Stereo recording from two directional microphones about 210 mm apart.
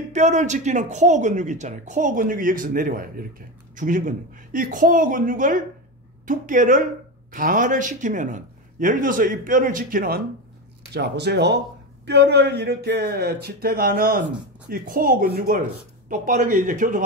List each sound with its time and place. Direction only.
0.1 s speech: 35° right (ahead or behind)